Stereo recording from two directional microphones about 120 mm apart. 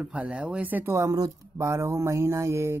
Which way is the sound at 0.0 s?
10° right (ahead or behind).